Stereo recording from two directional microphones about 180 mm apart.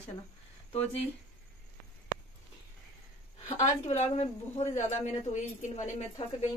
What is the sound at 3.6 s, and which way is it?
A woman's voice, 40° left (ahead or behind).